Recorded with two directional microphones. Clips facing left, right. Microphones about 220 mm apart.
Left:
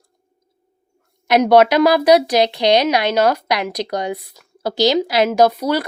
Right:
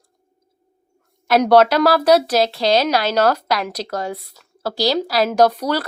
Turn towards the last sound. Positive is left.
turn(degrees=10)  # may be behind; listen again after turning